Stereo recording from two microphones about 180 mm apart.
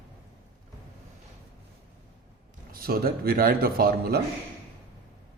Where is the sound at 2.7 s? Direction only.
55° right (ahead or behind).